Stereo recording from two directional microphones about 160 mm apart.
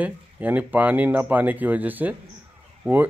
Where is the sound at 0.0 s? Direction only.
10° right (ahead or behind).